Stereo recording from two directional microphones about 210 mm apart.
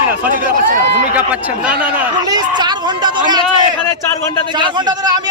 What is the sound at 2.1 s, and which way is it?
A man's voice, 20° right (ahead or behind).